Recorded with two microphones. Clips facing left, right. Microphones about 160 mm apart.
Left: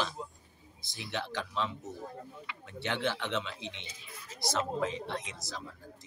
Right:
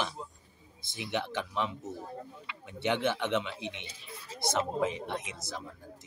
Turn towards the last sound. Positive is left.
turn(degrees=-15)  # may be behind; listen again after turning